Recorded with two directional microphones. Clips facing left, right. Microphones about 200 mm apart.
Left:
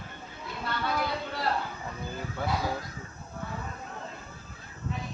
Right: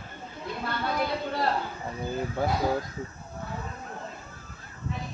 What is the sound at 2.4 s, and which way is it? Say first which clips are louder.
Speech: right 4 dB; 40° right (ahead or behind).